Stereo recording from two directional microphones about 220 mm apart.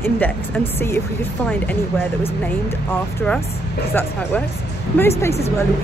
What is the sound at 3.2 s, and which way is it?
A woman's voice, 5° left (ahead or behind).